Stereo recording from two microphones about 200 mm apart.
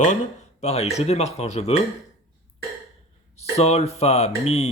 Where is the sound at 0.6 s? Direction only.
30° left (ahead or behind).